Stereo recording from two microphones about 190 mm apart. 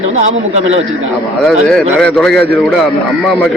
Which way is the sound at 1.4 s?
Centre (ahead or behind).